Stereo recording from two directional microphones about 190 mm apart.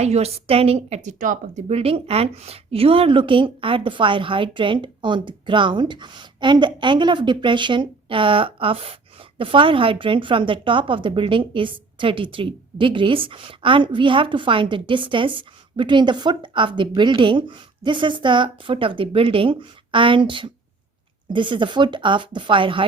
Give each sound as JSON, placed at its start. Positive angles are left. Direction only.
{"t": 0.0, "sound": "speech", "side_deg": -35}
{"t": 1.6, "sound": "a woman's voice", "side_deg": -30}